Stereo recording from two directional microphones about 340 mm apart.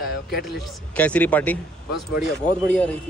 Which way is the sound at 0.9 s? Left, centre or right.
Centre.